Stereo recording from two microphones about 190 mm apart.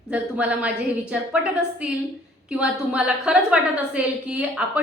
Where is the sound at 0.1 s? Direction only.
5° right (ahead or behind).